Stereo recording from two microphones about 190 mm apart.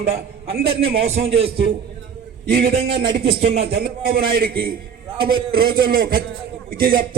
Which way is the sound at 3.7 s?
50° right (ahead or behind).